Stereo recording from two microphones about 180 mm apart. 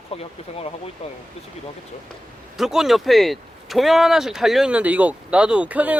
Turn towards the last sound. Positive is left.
turn(degrees=-10)  # may be behind; listen again after turning